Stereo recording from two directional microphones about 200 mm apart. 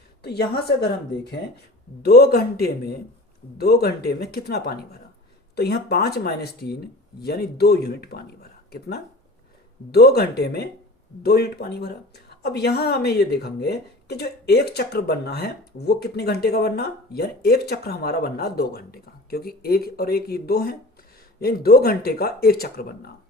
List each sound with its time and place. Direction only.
0.2 s a woman's voice: 55° left (ahead or behind)